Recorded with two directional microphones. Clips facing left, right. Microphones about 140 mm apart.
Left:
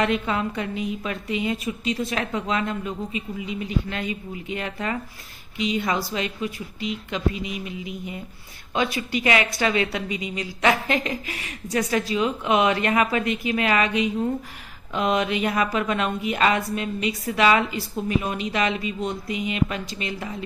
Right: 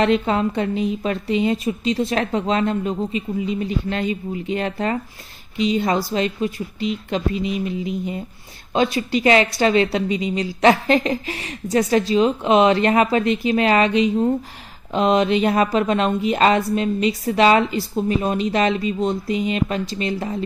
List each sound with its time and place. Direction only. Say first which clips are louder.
0.0 s a woman's voice: right 5 dB; 30° right (ahead or behind)